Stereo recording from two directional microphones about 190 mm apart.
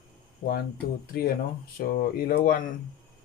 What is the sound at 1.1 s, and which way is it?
Speech, 55° left (ahead or behind).